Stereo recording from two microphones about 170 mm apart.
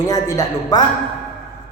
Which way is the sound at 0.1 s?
20° left (ahead or behind).